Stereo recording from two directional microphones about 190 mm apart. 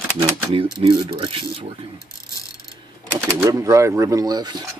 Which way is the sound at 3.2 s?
15° right (ahead or behind).